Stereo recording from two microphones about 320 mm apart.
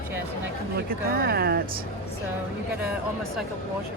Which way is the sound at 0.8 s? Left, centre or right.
Right.